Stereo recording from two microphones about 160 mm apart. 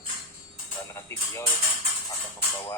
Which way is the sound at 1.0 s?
15° left (ahead or behind).